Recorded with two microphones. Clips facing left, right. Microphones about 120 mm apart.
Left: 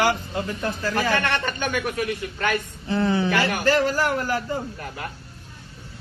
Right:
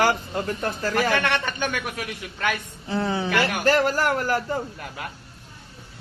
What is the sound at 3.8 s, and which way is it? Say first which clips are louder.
Speech: even; 50° right (ahead or behind).